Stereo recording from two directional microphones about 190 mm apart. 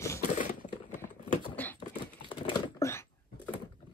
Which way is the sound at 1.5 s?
10° left (ahead or behind).